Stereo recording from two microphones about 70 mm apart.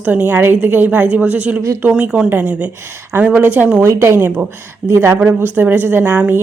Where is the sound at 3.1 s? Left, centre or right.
Right.